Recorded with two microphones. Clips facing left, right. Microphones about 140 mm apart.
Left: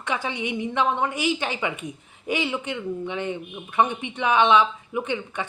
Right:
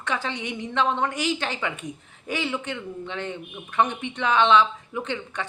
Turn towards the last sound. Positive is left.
turn(degrees=10)  # may be behind; listen again after turning